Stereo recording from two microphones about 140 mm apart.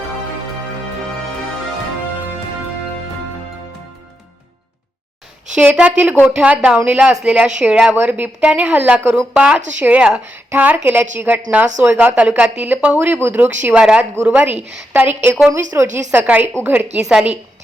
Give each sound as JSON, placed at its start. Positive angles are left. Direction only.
{"t": 5.5, "sound": "a woman's voice", "side_deg": -10}
{"t": 17.0, "sound": "a woman's voice", "side_deg": -5}